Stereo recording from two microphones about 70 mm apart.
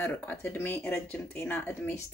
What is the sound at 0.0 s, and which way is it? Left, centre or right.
Speech, left.